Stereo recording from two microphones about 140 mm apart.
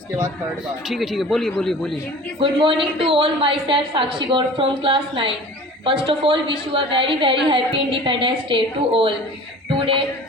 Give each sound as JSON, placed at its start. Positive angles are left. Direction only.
{"t": 0.9, "sound": "speech", "side_deg": 0}
{"t": 2.4, "sound": "a woman's voice", "side_deg": -35}